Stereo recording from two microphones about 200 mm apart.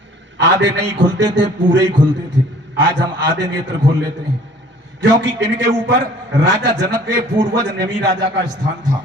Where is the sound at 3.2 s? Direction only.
60° right (ahead or behind).